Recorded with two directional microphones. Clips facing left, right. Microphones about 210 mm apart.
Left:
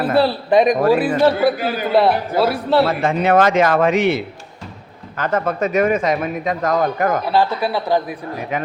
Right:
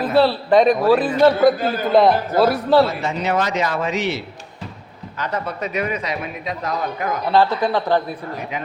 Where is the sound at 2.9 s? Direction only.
55° left (ahead or behind).